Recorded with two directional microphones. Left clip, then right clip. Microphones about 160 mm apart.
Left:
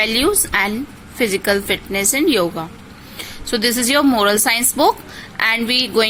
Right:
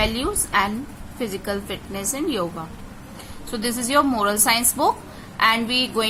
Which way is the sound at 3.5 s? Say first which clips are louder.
Left 4 dB; 25° left (ahead or behind).